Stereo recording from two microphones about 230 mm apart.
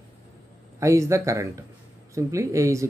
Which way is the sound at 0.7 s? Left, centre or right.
Centre.